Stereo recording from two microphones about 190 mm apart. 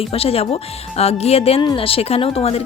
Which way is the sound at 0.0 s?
30° left (ahead or behind).